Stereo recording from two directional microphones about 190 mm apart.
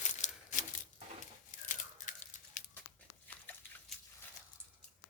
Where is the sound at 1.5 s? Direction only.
45° left (ahead or behind).